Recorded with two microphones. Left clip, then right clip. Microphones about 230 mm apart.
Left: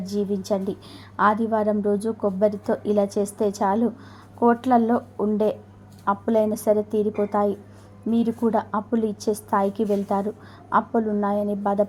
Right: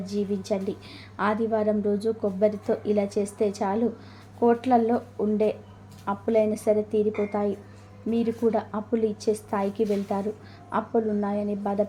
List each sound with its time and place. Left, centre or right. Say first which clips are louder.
0.0 s a woman's voice: left 3 dB; centre